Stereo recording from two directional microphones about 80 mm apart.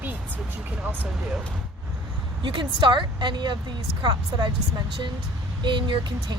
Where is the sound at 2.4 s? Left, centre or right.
Right.